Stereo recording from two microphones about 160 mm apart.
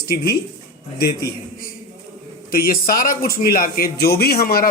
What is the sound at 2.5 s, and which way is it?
A man's voice, 65° left (ahead or behind).